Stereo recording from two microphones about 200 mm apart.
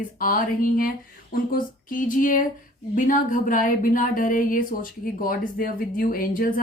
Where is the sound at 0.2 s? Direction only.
45° left (ahead or behind).